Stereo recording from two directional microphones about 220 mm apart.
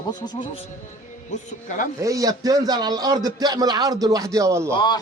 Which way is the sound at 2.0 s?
15° right (ahead or behind).